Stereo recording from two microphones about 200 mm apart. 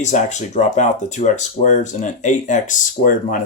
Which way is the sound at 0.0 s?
35° left (ahead or behind).